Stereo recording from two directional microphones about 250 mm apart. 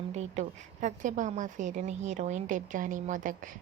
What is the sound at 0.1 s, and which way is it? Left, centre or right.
A woman's voice, right.